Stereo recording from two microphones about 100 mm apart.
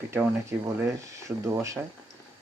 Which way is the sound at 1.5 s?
30° right (ahead or behind).